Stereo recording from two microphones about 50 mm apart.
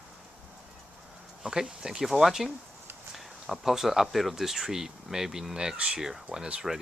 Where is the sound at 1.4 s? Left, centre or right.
Centre.